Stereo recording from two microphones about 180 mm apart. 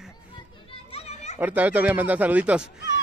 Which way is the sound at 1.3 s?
10° right (ahead or behind).